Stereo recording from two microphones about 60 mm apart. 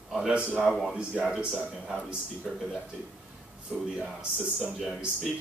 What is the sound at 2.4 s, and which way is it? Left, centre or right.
Speech, centre.